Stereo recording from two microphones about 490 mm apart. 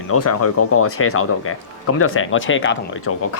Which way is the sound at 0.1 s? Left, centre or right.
Left.